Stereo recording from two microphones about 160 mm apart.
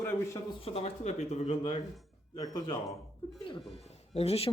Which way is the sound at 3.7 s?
40° left (ahead or behind).